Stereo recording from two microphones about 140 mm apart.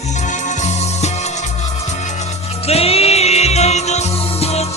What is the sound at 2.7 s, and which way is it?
Music, 45° left (ahead or behind).